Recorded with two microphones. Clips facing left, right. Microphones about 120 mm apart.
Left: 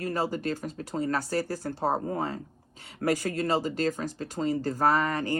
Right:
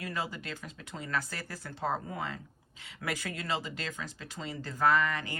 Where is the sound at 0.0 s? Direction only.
40° left (ahead or behind).